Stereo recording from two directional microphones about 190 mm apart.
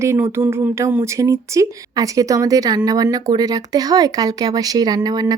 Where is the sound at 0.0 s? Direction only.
15° right (ahead or behind).